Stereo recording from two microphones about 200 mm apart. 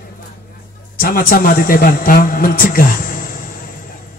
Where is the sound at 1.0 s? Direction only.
45° left (ahead or behind).